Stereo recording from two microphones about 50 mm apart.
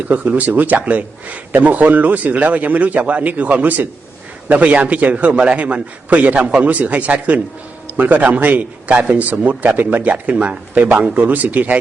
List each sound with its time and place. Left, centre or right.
0.1 s a man's voice: right